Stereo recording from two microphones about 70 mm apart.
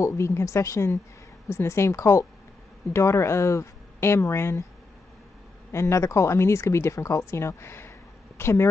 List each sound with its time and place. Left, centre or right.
0.0 s speech: left
5.7 s speech: left